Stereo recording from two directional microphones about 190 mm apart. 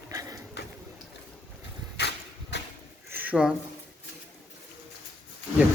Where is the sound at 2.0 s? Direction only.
60° left (ahead or behind).